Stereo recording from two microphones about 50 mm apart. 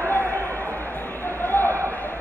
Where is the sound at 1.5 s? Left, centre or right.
Left.